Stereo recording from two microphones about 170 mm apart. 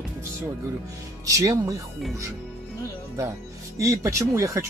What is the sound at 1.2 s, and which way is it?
Speech, 20° right (ahead or behind).